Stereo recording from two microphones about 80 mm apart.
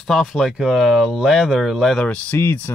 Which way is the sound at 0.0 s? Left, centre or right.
Centre.